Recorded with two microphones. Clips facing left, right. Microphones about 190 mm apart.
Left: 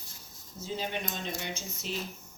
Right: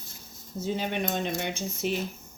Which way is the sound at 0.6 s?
60° right (ahead or behind).